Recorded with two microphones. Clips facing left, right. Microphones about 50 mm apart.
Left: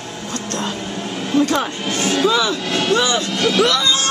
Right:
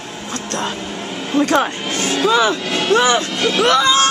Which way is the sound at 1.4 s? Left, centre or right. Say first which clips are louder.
Right 3 dB; right.